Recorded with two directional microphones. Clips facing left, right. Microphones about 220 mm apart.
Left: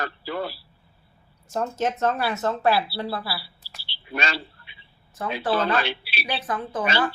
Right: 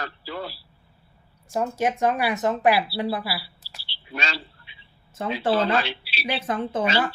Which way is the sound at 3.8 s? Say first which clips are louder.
Left 3 dB; 55° left (ahead or behind).